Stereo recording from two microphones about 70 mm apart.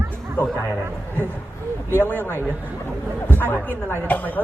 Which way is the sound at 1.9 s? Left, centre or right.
Left.